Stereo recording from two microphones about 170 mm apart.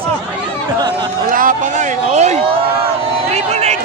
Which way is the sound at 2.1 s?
40° right (ahead or behind).